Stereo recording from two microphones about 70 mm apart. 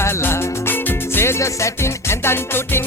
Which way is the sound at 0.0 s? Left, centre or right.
Left.